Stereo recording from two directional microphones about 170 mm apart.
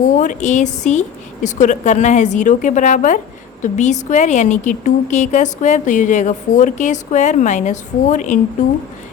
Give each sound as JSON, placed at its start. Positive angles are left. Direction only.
{"t": 0.2, "sound": "a woman's voice", "side_deg": 45}